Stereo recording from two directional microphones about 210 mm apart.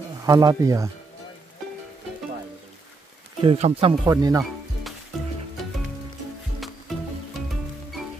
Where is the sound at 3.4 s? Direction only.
25° right (ahead or behind).